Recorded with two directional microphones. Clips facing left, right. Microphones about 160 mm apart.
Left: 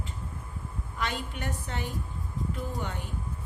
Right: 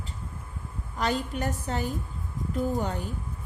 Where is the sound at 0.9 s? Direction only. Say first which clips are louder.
Right 6 dB; 40° right (ahead or behind).